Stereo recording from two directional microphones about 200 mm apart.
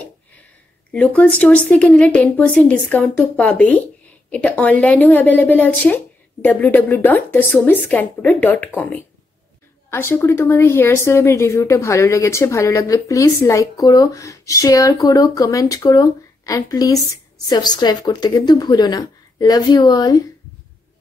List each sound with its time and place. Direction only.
0.9 s a woman's voice: 5° left (ahead or behind)